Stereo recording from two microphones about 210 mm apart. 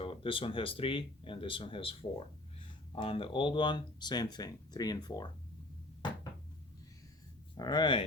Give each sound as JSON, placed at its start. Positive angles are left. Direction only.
{"t": 0.0, "sound": "speech", "side_deg": 25}
{"t": 6.0, "sound": "cupboard open or close", "side_deg": 20}
{"t": 7.5, "sound": "speech", "side_deg": 20}